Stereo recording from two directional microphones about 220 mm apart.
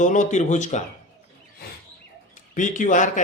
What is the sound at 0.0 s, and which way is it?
Speech, 35° left (ahead or behind).